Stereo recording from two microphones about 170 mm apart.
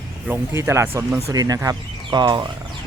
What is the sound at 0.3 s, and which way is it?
Speech, 15° right (ahead or behind).